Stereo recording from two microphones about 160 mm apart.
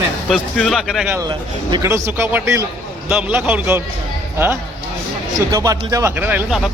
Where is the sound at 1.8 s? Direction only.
15° right (ahead or behind).